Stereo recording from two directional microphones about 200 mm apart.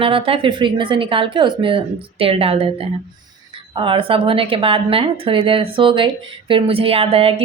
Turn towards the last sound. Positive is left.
turn(degrees=-30)  # may be behind; listen again after turning